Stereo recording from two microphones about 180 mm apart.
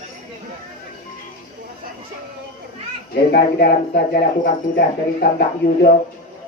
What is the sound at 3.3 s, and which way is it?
Speech, 60° left (ahead or behind).